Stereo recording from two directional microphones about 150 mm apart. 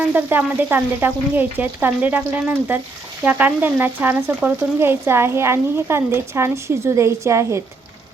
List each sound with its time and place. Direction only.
0.1 s frying: 10° right (ahead or behind)